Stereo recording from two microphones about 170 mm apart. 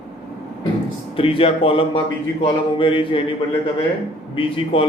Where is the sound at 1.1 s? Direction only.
35° left (ahead or behind).